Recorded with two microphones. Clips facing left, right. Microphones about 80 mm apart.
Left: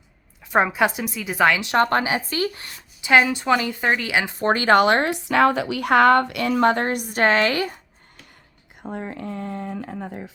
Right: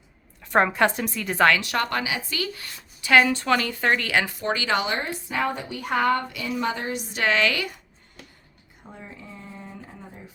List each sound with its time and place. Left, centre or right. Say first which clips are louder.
0.4 s a woman's voice: left 1 dB; centre
1.5 s a woman's voice: left 6 dB; left
4.4 s a woman's voice: left 8 dB; left
8.8 s speech: left 11 dB; left